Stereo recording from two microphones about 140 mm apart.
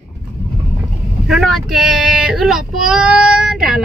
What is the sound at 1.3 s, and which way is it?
Child singing, centre (ahead or behind).